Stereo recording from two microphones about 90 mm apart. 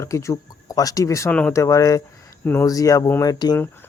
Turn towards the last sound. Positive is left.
turn(degrees=45)  # may be behind; listen again after turning